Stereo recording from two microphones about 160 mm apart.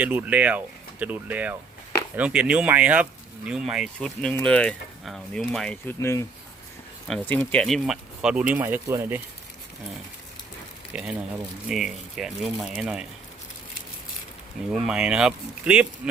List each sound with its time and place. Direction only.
0.0 s speech: 10° right (ahead or behind); by 5.9 s 5° left (ahead or behind)
6.0 s speech: 20° left (ahead or behind); by 9.2 s 15° right (ahead or behind)
10.9 s speech: 5° right (ahead or behind)
14.7 s speech: 5° right (ahead or behind)